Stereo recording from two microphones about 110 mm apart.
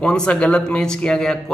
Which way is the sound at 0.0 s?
10° left (ahead or behind).